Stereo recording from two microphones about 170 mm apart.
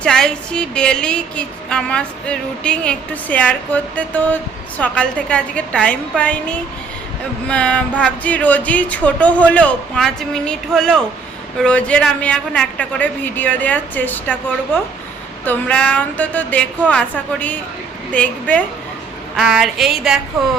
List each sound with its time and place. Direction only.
0.0 s a woman's voice: 5° left (ahead or behind)
19.4 s a woman's voice: centre (ahead or behind)